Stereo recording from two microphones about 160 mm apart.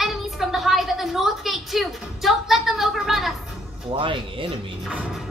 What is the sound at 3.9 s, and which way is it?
Speech, 30° right (ahead or behind).